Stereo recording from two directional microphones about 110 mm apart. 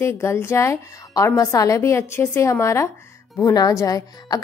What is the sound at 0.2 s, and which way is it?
A woman's voice, 25° left (ahead or behind).